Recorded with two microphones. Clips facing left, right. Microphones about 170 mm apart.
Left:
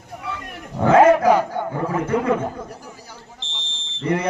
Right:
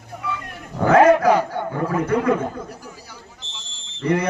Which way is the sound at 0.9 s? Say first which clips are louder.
Even; 25° left (ahead or behind).